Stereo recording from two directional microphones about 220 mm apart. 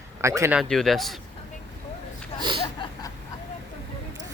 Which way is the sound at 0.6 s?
Centre (ahead or behind).